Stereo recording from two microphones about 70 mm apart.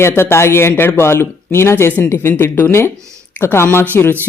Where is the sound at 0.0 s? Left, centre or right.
Left.